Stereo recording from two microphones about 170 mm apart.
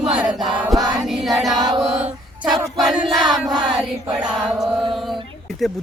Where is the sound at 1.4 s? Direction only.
Centre (ahead or behind).